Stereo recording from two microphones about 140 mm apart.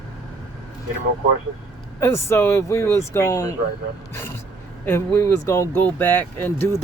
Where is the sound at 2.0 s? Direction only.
20° left (ahead or behind).